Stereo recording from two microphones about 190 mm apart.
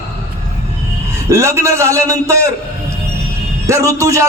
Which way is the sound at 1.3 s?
15° right (ahead or behind).